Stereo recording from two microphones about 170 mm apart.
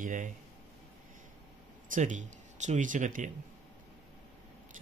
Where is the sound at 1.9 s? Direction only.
45° right (ahead or behind).